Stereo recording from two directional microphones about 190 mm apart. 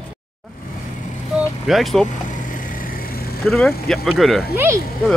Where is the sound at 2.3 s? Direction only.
45° left (ahead or behind).